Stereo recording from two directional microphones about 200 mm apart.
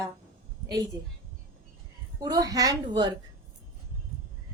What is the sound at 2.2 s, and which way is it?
Speech, 20° right (ahead or behind).